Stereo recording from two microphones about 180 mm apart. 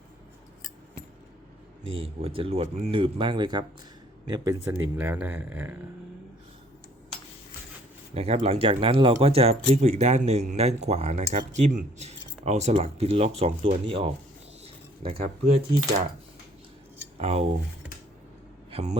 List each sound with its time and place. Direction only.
1.8 s speech: 35° right (ahead or behind); by 5.7 s 10° right (ahead or behind)
8.1 s speech: 35° right (ahead or behind)
14.6 s bird: 35° right (ahead or behind)
17.2 s speech: 35° right (ahead or behind)
18.7 s a man's voice: 35° right (ahead or behind)